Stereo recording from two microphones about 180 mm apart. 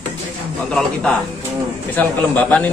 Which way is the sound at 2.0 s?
5° left (ahead or behind).